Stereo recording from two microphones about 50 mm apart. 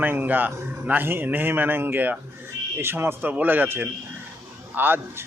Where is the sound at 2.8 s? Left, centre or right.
Right.